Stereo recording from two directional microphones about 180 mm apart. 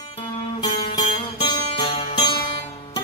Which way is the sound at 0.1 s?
30° left (ahead or behind).